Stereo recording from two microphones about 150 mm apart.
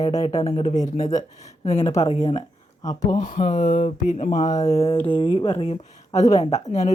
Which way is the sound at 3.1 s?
60° left (ahead or behind).